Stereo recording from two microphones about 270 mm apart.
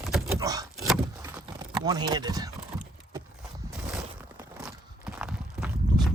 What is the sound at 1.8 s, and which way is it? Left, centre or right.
Speech, centre.